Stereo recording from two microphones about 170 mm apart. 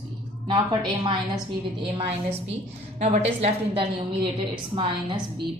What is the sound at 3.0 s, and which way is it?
Speech, 40° right (ahead or behind).